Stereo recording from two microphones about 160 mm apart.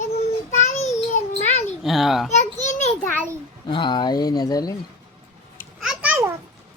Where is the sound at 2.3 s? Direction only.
45° left (ahead or behind).